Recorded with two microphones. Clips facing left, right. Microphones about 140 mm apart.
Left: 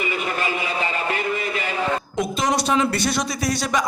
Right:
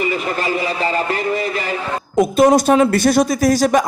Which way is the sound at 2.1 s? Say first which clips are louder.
Right 14 dB; 50° right (ahead or behind).